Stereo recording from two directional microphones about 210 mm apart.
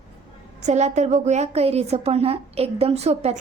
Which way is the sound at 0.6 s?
35° right (ahead or behind).